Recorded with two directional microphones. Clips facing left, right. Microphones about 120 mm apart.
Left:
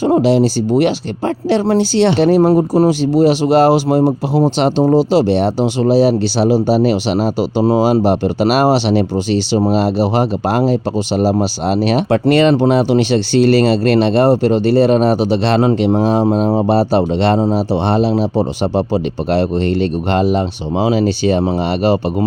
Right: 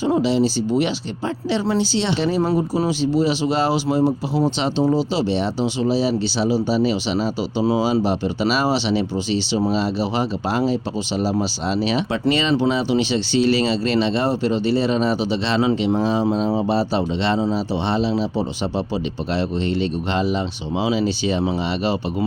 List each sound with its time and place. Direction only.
0.0 s speech: 55° left (ahead or behind)
4.6 s speech: 50° left (ahead or behind)
5.1 s speech: 65° left (ahead or behind)